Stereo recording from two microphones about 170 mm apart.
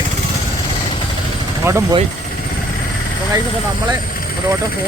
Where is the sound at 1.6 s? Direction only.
15° right (ahead or behind).